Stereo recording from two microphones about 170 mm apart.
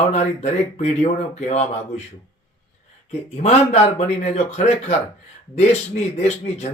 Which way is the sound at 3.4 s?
40° left (ahead or behind).